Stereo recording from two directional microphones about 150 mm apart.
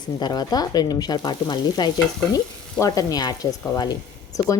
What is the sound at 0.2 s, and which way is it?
Speech, 25° left (ahead or behind).